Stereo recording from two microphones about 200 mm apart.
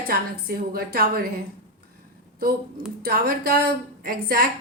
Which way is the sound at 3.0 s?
45° right (ahead or behind).